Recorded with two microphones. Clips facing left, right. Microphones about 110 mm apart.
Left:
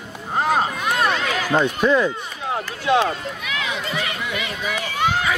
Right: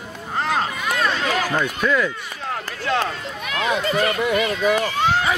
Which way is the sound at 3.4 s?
45° right (ahead or behind).